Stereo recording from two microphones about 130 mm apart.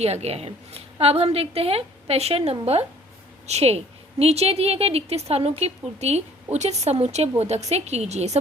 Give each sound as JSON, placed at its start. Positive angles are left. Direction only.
{"t": 0.0, "sound": "a woman's voice", "side_deg": -55}